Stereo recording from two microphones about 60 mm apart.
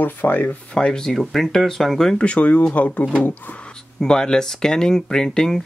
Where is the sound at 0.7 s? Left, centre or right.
Centre.